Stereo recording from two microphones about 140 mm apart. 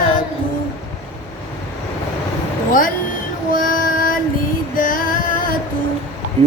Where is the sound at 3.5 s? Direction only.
75° left (ahead or behind).